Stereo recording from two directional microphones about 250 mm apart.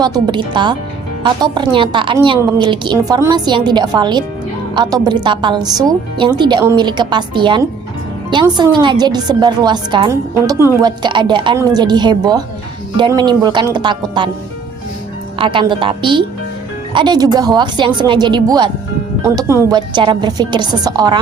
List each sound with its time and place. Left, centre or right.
0.0 s a woman's voice: centre
15.4 s a woman's voice: centre